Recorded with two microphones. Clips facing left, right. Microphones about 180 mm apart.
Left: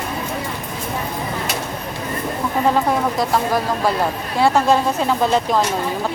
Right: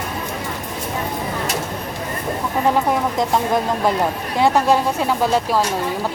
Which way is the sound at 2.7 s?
20° right (ahead or behind).